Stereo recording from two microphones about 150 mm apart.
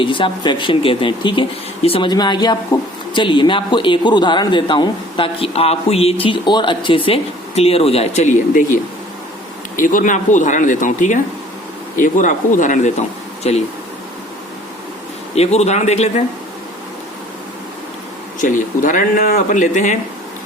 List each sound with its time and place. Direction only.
0.0 s speech: 35° left (ahead or behind)
15.4 s speech: 45° left (ahead or behind)
18.3 s speech: 60° left (ahead or behind)